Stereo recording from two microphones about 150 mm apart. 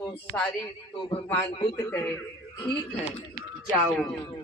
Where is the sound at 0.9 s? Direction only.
35° left (ahead or behind).